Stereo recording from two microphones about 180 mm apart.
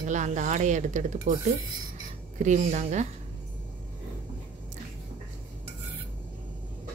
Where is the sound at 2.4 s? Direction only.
45° right (ahead or behind).